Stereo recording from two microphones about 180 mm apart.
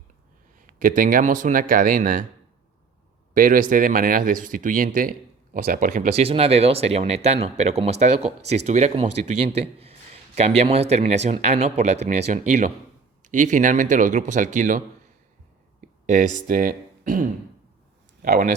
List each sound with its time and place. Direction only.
0.8 s speech: 50° right (ahead or behind)
3.3 s speech: 50° right (ahead or behind)
16.0 s speech: 45° right (ahead or behind)